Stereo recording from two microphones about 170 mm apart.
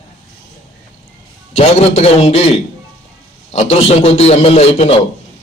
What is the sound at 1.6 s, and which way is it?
A man's voice, 40° left (ahead or behind).